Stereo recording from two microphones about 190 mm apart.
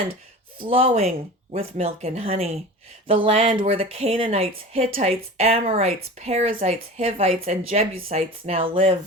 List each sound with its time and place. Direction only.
0.7 s a woman's voice: 30° right (ahead or behind)